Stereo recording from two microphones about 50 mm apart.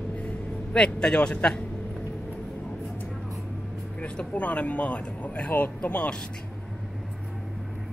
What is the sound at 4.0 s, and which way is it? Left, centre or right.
Speech, left.